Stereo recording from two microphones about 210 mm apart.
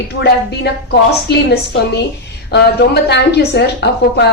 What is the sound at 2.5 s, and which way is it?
A woman's voice, 55° left (ahead or behind).